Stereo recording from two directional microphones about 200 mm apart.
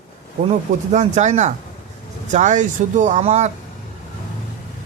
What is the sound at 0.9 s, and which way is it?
Speech, 35° right (ahead or behind).